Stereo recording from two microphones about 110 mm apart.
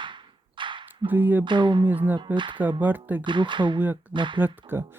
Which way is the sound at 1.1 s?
15° right (ahead or behind).